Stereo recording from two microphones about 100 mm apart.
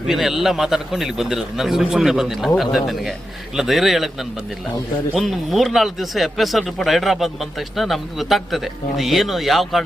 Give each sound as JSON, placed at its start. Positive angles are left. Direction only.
{"t": 0.1, "sound": "a man's voice", "side_deg": -5}
{"t": 5.1, "sound": "a man's voice", "side_deg": 0}